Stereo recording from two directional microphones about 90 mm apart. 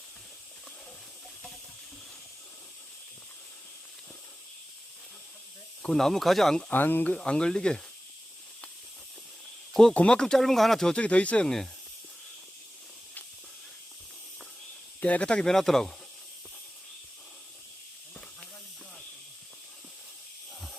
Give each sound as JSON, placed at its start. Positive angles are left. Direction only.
{"t": 5.8, "sound": "speech", "side_deg": 5}
{"t": 6.7, "sound": "speech", "side_deg": 20}
{"t": 7.2, "sound": "speech", "side_deg": 10}
{"t": 9.9, "sound": "speech", "side_deg": 10}
{"t": 15.0, "sound": "speech", "side_deg": 15}